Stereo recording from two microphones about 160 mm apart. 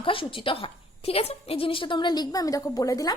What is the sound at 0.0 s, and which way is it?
A woman's voice, 35° left (ahead or behind).